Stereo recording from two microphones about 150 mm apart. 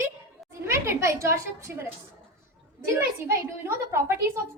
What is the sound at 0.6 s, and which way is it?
A woman's voice, 15° right (ahead or behind).